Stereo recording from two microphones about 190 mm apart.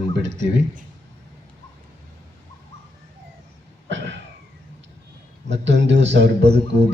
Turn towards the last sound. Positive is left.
turn(degrees=-65)  # may be behind; listen again after turning